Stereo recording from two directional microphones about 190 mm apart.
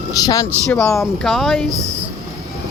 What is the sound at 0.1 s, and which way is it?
Speech, 20° left (ahead or behind).